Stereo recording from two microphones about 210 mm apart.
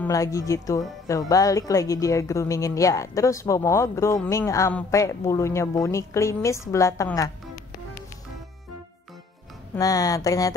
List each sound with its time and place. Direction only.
0.0 s a woman's voice: 15° left (ahead or behind)
9.8 s speech: 15° left (ahead or behind)